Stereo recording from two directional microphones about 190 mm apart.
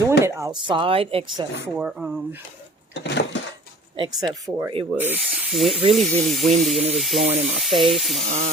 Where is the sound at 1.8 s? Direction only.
5° right (ahead or behind).